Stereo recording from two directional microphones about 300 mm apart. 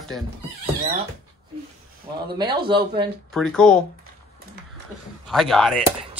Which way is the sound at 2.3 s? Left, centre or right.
Centre.